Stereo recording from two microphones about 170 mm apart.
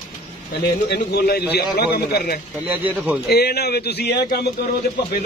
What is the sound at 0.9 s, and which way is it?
A man's voice, 65° left (ahead or behind).